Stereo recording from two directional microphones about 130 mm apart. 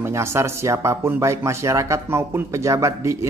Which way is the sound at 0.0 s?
20° right (ahead or behind).